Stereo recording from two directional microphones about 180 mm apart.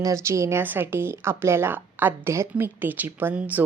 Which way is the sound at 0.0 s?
15° right (ahead or behind).